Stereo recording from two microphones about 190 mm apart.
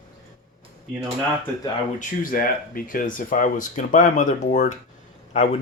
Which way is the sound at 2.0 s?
45° left (ahead or behind).